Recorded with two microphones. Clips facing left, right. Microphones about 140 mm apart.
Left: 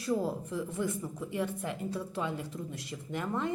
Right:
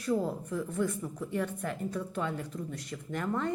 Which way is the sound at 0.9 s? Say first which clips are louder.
Even; 15° left (ahead or behind).